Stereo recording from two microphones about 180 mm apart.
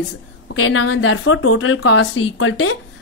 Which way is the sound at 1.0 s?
90° left.